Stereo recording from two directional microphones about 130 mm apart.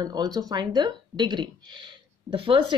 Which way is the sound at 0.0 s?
30° right (ahead or behind).